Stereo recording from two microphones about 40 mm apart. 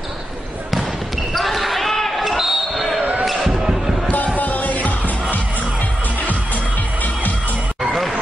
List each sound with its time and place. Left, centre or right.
1.3 s basketball bounce: centre
3.0 s basketball bounce: right
3.3 s basketball bounce: centre
4.4 s music: left
6.2 s music: left